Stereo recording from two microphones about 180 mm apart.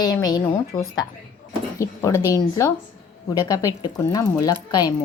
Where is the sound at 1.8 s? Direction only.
15° left (ahead or behind).